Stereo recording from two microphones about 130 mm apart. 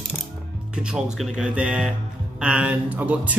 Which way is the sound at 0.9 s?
5° right (ahead or behind).